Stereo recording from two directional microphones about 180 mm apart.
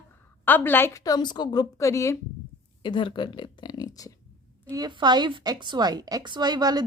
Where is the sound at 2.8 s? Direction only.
25° left (ahead or behind).